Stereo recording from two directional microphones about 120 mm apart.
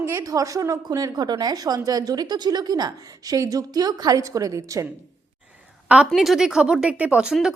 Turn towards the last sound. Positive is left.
turn(degrees=-5)  # may be behind; listen again after turning